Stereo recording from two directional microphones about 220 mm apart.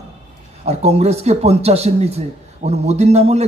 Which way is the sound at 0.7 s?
30° right (ahead or behind).